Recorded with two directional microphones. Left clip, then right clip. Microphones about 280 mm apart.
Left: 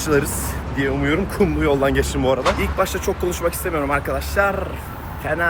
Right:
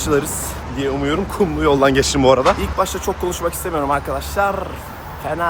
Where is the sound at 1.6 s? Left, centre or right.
Right.